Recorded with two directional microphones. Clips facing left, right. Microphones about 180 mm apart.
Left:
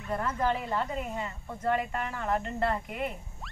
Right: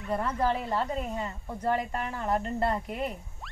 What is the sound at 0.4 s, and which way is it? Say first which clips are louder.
Speech: even; 35° right (ahead or behind).